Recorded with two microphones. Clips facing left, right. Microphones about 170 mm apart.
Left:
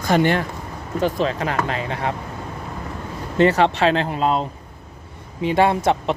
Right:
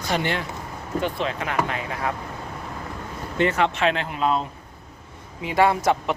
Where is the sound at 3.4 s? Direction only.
35° left (ahead or behind).